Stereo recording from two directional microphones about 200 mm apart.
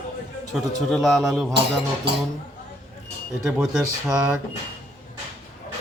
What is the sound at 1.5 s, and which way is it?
Music, 60° right (ahead or behind).